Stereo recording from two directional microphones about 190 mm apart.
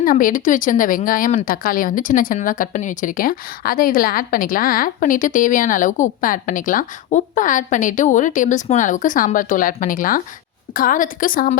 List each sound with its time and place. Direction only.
0.0 s speech: 45° left (ahead or behind)